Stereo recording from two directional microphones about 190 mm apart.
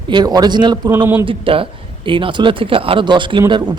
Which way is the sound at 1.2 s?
30° right (ahead or behind).